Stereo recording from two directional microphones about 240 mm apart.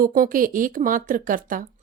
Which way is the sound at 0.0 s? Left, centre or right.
Right.